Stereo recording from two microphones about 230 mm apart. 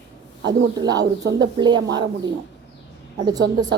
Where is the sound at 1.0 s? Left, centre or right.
Right.